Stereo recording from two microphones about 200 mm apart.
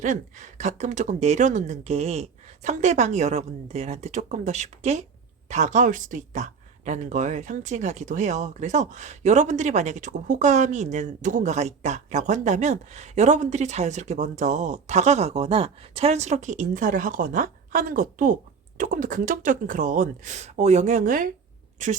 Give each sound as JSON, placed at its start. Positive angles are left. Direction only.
{"t": 0.0, "sound": "speech", "side_deg": -35}